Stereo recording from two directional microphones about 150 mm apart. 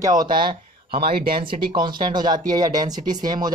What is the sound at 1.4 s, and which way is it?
Speech, 35° right (ahead or behind).